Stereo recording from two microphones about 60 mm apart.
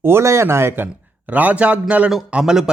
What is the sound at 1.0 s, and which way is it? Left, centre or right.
A man's voice, right.